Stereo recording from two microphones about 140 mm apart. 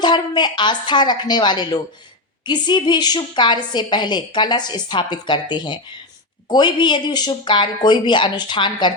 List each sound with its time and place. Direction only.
0.0 s a woman's voice: 30° left (ahead or behind)